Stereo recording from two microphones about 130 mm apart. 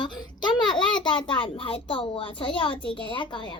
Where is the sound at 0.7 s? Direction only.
5° left (ahead or behind).